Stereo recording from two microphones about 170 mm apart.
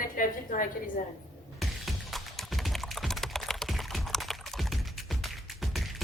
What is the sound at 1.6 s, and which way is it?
Typing, centre (ahead or behind).